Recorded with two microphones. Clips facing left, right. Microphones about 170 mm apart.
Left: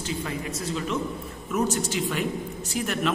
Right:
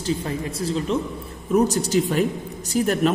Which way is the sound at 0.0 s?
35° right (ahead or behind).